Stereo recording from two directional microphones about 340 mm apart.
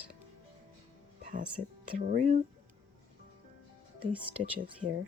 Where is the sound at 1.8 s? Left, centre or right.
Right.